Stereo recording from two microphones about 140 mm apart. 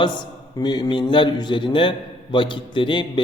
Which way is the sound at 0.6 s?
30° left (ahead or behind).